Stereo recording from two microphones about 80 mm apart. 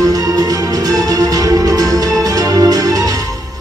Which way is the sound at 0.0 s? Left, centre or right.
Right.